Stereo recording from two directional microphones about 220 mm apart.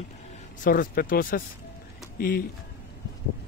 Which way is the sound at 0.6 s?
40° left (ahead or behind).